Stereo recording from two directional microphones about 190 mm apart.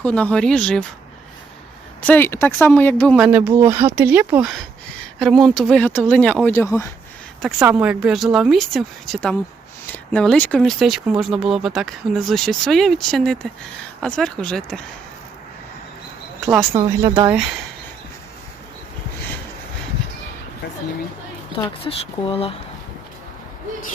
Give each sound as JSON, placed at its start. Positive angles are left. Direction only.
{"t": 0.0, "sound": "speech", "side_deg": 5}
{"t": 2.0, "sound": "speech", "side_deg": 10}
{"t": 3.2, "sound": "speech", "side_deg": -5}
{"t": 7.6, "sound": "speech", "side_deg": -10}
{"t": 16.7, "sound": "speech", "side_deg": -25}
{"t": 17.2, "sound": "speech", "side_deg": -5}
{"t": 21.6, "sound": "speech", "side_deg": 30}